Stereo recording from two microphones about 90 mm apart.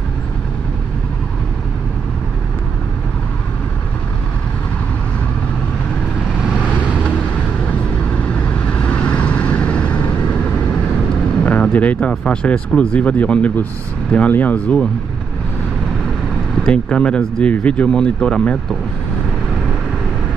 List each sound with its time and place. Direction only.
6.6 s vehicle: 15° left (ahead or behind)
11.4 s speech: 15° left (ahead or behind)
16.6 s speech: 10° left (ahead or behind)